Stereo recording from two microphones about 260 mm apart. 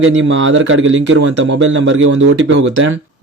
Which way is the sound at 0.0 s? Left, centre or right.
Right.